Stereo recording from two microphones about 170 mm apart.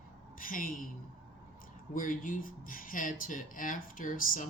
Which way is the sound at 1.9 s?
55° left (ahead or behind).